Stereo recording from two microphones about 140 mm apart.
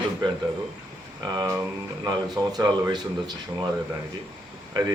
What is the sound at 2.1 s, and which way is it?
Speech, 30° right (ahead or behind).